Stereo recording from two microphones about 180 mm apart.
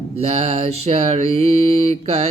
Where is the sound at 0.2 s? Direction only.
35° right (ahead or behind).